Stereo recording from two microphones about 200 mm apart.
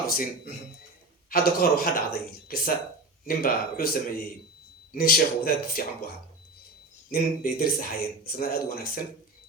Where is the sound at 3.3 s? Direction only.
45° left (ahead or behind).